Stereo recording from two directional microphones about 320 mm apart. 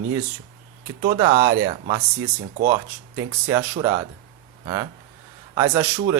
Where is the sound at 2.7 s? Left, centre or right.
Centre.